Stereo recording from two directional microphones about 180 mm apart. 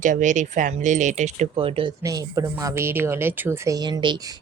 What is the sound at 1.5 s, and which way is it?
Speech, 30° right (ahead or behind).